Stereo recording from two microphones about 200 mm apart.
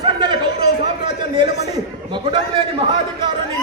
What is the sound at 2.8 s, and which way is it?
Speech, 25° right (ahead or behind).